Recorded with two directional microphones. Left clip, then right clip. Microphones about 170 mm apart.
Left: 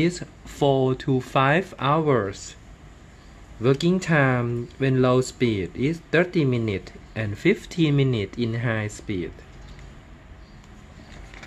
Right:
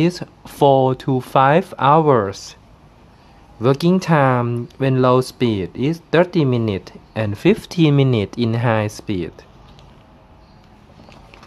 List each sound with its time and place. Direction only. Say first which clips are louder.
0.0 s speech: right 5 dB; 35° right (ahead or behind)
3.6 s speech: right 5 dB; 40° right (ahead or behind)